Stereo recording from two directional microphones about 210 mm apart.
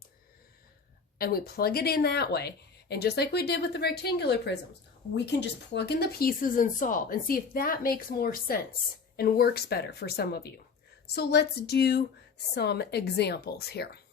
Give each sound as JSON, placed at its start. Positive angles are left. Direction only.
{"t": 1.2, "sound": "speech", "side_deg": 45}